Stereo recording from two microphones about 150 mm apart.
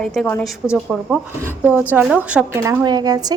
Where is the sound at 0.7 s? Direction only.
5° right (ahead or behind).